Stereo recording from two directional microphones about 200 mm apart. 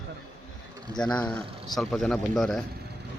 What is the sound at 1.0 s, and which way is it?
Speech, 5° left (ahead or behind).